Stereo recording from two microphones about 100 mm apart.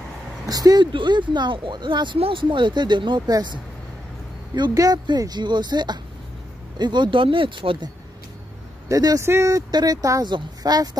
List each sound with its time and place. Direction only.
0.5 s speech: 40° right (ahead or behind)
0.9 s speech: 50° right (ahead or behind)
2.1 s speech: 65° right (ahead or behind)
4.7 s speech: 40° right (ahead or behind); by 7.9 s 55° right (ahead or behind)
8.8 s speech: 35° right (ahead or behind)